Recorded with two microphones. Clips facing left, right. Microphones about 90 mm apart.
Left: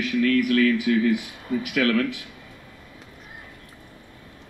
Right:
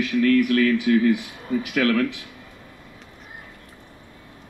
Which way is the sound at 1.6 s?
35° right (ahead or behind).